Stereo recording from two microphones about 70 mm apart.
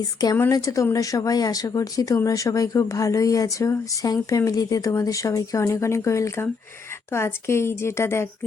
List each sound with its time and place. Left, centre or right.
0.2 s a woman's voice: left
0.5 s a woman's voice: left